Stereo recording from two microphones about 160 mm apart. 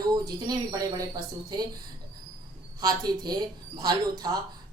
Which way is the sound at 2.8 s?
25° right (ahead or behind).